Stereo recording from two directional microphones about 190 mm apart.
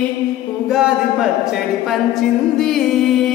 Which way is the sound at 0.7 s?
5° right (ahead or behind).